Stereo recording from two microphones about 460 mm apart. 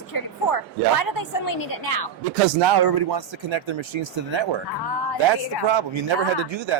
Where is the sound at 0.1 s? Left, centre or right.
Left.